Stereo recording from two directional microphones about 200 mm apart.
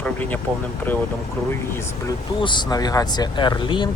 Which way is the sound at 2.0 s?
25° left (ahead or behind).